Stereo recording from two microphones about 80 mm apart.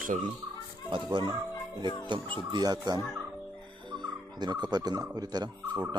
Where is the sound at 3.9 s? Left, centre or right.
Right.